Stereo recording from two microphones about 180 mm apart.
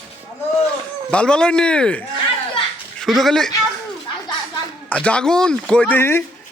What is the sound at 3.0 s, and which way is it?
Speech, centre (ahead or behind).